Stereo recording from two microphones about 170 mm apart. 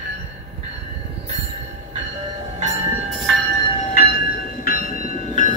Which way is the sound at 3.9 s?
65° left (ahead or behind).